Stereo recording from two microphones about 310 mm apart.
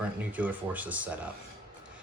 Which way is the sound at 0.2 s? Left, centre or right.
Centre.